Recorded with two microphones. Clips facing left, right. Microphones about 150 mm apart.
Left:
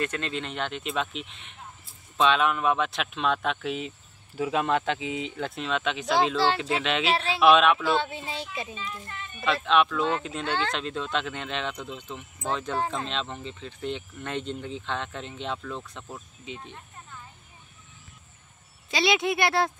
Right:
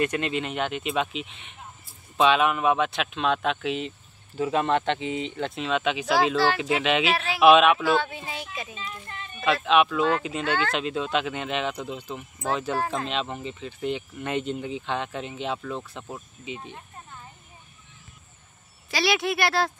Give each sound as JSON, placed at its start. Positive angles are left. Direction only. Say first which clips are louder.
{"t": 0.0, "sound": "speech", "louder": "right 5 dB", "side_deg": -10}
{"t": 8.0, "sound": "speech", "louder": "even", "side_deg": 30}
{"t": 8.7, "sound": "speech", "louder": "even", "side_deg": -25}
{"t": 9.5, "sound": "speech", "louder": "right 2 dB", "side_deg": -5}
{"t": 18.9, "sound": "speech", "louder": "even", "side_deg": 20}